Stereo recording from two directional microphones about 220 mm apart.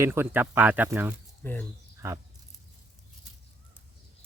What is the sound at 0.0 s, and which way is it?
Speech, 10° right (ahead or behind).